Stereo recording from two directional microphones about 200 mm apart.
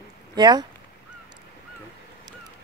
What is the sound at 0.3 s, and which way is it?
Speech, 20° right (ahead or behind).